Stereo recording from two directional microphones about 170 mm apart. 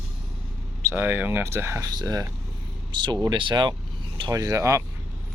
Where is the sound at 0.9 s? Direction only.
10° right (ahead or behind).